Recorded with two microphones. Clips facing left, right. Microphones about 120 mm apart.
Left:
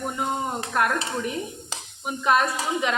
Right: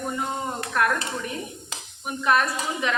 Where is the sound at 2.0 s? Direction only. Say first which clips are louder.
Left 1 dB; 20° left (ahead or behind).